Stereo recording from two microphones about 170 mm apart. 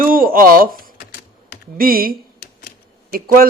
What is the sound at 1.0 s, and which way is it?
Typing, 60° left (ahead or behind).